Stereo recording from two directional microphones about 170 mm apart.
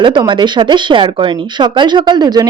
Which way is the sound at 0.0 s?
30° right (ahead or behind).